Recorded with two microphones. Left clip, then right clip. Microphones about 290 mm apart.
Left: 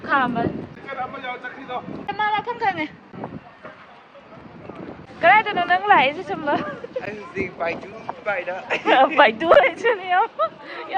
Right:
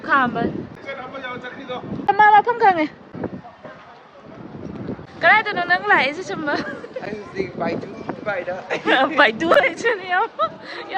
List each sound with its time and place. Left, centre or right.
0.0 s speech: centre
2.0 s speech: right
5.2 s a woman's voice: centre
8.3 s a woman's voice: centre